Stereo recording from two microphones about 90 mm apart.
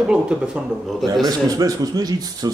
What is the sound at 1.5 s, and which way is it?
Speech, 45° right (ahead or behind).